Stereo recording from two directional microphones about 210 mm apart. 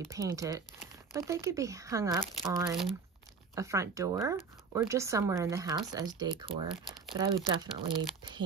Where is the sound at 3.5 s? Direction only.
15° right (ahead or behind).